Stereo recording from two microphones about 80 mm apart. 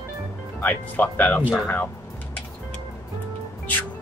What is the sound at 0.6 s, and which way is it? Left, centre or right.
Speech, left.